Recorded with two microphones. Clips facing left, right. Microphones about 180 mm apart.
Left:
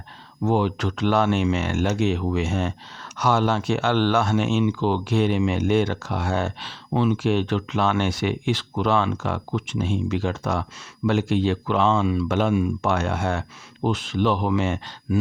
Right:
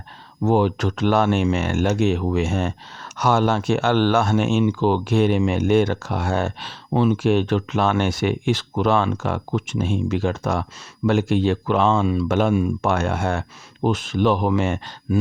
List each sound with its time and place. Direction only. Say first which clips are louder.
0.4 s speech: right 3 dB; 45° right (ahead or behind)